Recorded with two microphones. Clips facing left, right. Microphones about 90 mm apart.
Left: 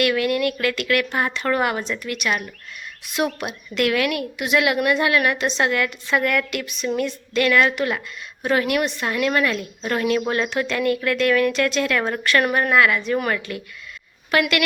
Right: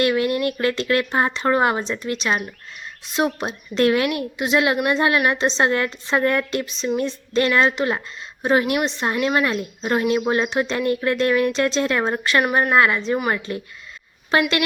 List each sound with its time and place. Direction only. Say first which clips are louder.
0.0 s a woman's voice: right 1 dB; 25° right (ahead or behind)